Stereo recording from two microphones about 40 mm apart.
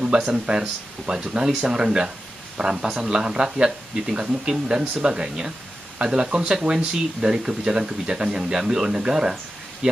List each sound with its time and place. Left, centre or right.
0.3 s speech: centre
2.8 s speech: centre